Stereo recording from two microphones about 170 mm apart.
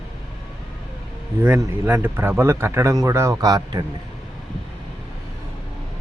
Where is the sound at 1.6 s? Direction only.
10° right (ahead or behind).